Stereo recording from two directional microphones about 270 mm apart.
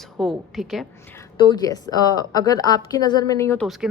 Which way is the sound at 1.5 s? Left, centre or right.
Centre.